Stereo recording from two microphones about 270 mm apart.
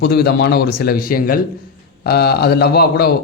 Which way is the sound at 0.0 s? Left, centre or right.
Left.